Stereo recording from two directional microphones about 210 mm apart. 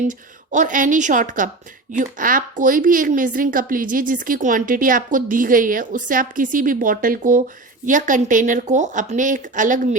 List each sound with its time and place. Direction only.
0.1 s a woman's voice: 35° right (ahead or behind)